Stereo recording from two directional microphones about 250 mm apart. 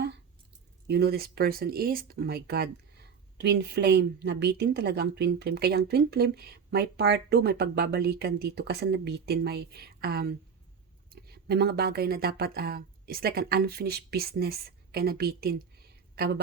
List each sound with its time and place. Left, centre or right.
0.9 s a woman's voice: right